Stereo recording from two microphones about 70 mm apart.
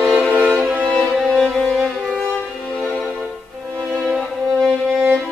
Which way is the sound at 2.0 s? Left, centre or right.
Centre.